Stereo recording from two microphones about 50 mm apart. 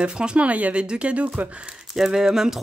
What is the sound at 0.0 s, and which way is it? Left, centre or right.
Speech, right.